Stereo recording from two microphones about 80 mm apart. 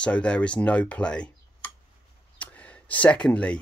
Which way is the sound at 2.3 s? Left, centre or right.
Centre.